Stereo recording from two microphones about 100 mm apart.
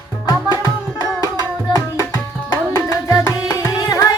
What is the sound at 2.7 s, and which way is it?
Tabla, 35° left (ahead or behind).